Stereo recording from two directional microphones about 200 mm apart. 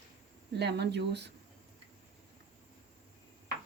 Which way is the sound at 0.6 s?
55° right (ahead or behind).